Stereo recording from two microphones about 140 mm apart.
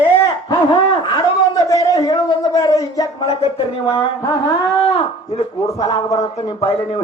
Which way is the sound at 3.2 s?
45° left (ahead or behind).